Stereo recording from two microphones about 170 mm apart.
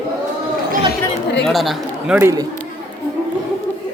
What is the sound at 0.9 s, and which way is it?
Chatter, 80° left.